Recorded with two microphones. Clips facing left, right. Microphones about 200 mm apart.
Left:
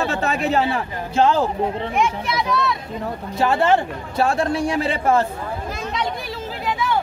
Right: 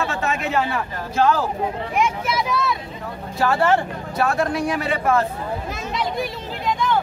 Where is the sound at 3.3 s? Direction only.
20° left (ahead or behind).